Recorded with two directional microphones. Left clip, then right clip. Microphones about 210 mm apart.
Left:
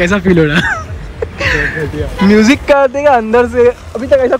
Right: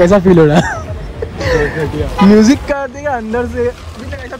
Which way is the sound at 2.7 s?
Centre (ahead or behind).